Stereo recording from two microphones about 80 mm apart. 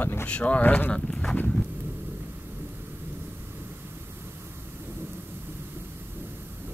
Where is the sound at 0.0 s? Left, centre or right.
Left.